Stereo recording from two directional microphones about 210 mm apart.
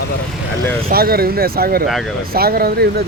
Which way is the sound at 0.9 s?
45° right (ahead or behind).